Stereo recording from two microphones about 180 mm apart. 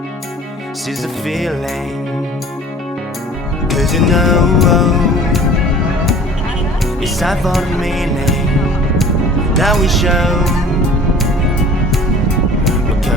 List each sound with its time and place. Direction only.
1.3 s music: centre (ahead or behind)
3.7 s music: centre (ahead or behind)
7.0 s music: centre (ahead or behind)
9.5 s music: centre (ahead or behind)